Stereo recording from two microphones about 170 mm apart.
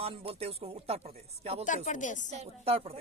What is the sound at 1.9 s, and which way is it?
Speech, 45° left (ahead or behind).